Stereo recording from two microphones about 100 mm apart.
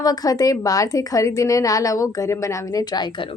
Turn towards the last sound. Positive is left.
turn(degrees=45)  # may be behind; listen again after turning